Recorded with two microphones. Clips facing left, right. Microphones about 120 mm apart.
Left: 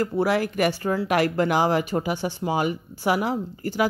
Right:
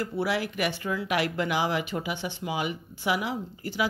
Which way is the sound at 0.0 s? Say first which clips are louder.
Left 6 dB; 45° left (ahead or behind).